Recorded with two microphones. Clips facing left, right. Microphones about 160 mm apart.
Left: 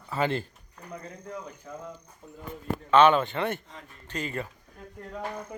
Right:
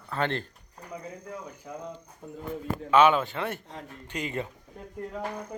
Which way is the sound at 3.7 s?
70° right (ahead or behind).